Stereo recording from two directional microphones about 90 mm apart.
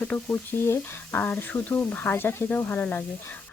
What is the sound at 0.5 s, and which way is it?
Speech, 25° left (ahead or behind).